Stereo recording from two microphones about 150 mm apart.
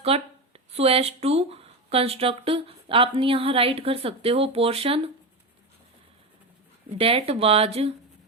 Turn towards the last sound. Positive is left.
turn(degrees=-40)  # may be behind; listen again after turning